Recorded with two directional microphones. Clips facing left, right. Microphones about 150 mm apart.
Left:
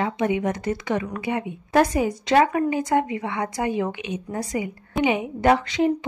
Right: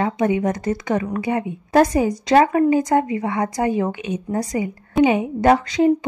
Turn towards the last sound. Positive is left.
turn(degrees=-35)  # may be behind; listen again after turning